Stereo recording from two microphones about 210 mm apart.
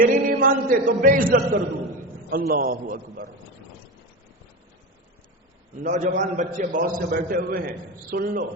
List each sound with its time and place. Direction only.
0.3 s a man's voice: 40° right (ahead or behind)
5.8 s a man's voice: 35° right (ahead or behind)